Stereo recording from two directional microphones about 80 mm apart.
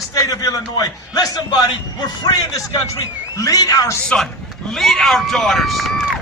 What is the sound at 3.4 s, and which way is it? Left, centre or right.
Speech, left.